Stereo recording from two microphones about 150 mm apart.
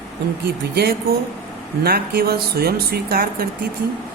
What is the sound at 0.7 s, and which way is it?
Speech, 90° right.